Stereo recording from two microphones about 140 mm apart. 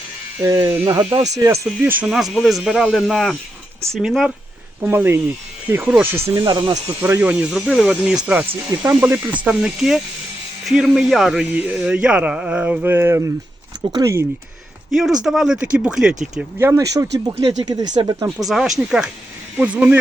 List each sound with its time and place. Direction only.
0.4 s speech: 15° right (ahead or behind)
0.9 s speech: 35° right (ahead or behind)
1.8 s speech: 10° right (ahead or behind)
4.8 s speech: 15° right (ahead or behind)
6.3 s speech: 35° right (ahead or behind)
7.0 s speech: 15° right (ahead or behind)
14.8 s speech: centre (ahead or behind)
16.6 s speech: 20° right (ahead or behind)
17.3 s speech: 50° right (ahead or behind)
17.7 s speech: 30° right (ahead or behind)
18.3 s speech: centre (ahead or behind)